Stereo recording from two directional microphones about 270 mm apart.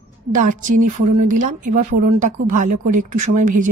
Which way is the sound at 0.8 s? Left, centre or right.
Right.